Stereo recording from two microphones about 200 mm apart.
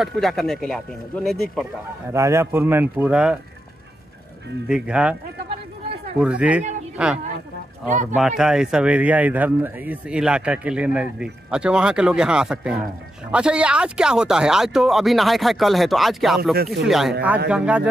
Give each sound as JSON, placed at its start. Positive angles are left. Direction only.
{"t": 0.0, "sound": "speech", "side_deg": 0}
{"t": 2.1, "sound": "speech", "side_deg": -15}
{"t": 4.6, "sound": "speech", "side_deg": -5}
{"t": 6.2, "sound": "speech", "side_deg": -5}